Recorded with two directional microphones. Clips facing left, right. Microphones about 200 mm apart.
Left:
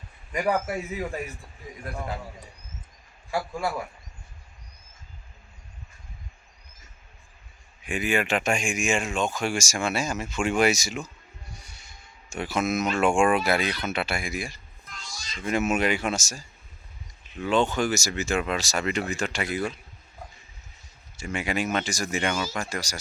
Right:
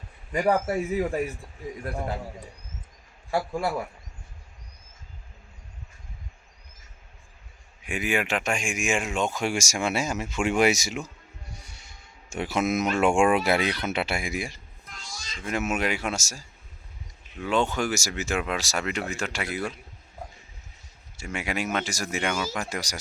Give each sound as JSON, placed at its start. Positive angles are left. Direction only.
{"t": 0.3, "sound": "speech", "side_deg": -30}
{"t": 7.9, "sound": "speech", "side_deg": -10}
{"t": 12.3, "sound": "speech", "side_deg": -20}
{"t": 15.4, "sound": "speech", "side_deg": -5}
{"t": 21.2, "sound": "speech", "side_deg": -5}